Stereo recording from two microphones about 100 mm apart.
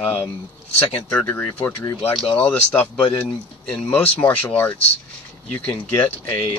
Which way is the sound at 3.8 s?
15° left (ahead or behind).